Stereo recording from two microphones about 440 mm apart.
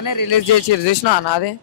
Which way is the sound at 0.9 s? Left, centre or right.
Left.